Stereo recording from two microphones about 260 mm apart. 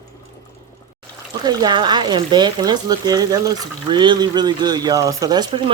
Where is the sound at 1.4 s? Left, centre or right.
Centre.